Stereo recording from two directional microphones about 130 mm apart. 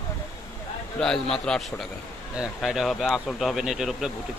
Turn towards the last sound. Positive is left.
turn(degrees=0)  # may be behind; listen again after turning